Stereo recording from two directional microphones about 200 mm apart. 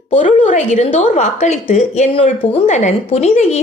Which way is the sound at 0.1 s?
40° left (ahead or behind).